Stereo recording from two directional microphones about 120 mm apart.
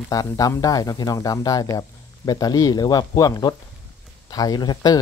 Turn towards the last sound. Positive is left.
turn(degrees=35)  # may be behind; listen again after turning